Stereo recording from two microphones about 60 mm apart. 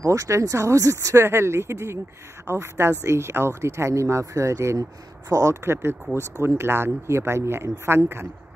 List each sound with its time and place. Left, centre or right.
0.0 s speech: right
1.2 s speech: right
5.3 s speech: right
5.6 s speech: right